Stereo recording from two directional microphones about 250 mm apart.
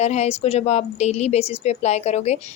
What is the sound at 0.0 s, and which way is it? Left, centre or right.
Speech, left.